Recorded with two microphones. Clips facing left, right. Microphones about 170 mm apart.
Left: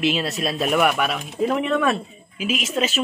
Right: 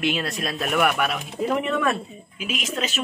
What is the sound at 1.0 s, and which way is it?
Speech, 5° right (ahead or behind).